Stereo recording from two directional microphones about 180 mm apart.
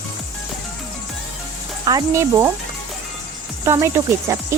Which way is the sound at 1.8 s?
20° right (ahead or behind).